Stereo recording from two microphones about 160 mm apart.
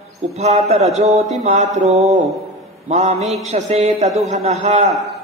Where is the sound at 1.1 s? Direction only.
45° right (ahead or behind).